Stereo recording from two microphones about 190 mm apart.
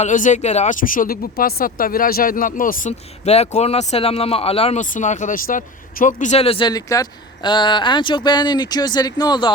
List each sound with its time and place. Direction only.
0.0 s speech: 40° left (ahead or behind); by 9.5 s 20° left (ahead or behind)